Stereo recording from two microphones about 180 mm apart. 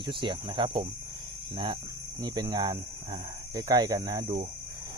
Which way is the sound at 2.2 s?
20° right (ahead or behind).